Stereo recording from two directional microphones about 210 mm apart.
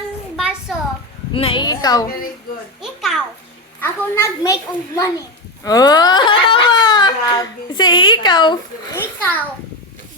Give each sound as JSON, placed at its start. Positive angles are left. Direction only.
{"t": 0.3, "sound": "a sound", "side_deg": 0}
{"t": 1.3, "sound": "a woman's voice", "side_deg": 25}
{"t": 2.8, "sound": "a sound", "side_deg": 0}
{"t": 3.8, "sound": "a child's voice", "side_deg": 10}
{"t": 5.6, "sound": "speech", "side_deg": 15}
{"t": 9.0, "sound": "a child's voice", "side_deg": 10}